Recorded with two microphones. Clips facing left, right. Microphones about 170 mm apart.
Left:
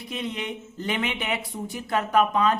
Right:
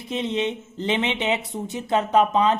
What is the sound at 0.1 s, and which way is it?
Speech, 25° right (ahead or behind).